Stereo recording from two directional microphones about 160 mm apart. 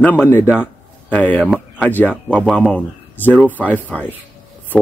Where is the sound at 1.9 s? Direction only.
10° left (ahead or behind).